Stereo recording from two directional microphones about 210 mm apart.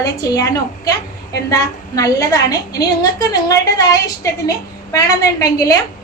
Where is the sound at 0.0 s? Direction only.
15° left (ahead or behind).